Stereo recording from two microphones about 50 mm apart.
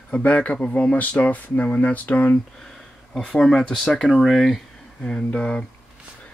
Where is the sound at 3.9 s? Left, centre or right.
Centre.